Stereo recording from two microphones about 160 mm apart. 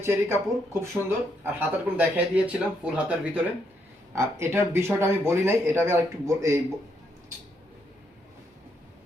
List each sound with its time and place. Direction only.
0.0 s speech: 15° right (ahead or behind)